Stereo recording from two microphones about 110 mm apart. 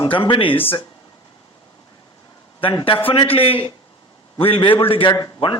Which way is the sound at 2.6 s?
55° left (ahead or behind).